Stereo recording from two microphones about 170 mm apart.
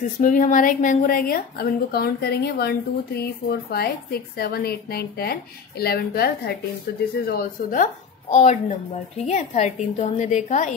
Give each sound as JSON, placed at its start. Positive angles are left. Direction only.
{"t": 0.2, "sound": "a woman's voice", "side_deg": 50}
{"t": 7.2, "sound": "a woman's voice", "side_deg": 55}